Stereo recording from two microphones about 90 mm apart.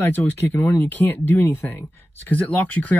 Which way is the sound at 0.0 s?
20° left (ahead or behind).